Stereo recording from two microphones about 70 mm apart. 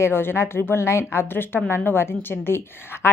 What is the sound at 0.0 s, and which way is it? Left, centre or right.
A woman's voice, left.